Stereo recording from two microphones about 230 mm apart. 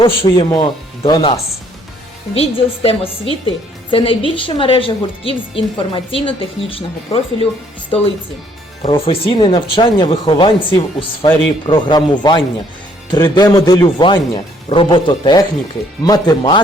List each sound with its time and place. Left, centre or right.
0.0 s a woman's voice: left
2.3 s a woman's voice: left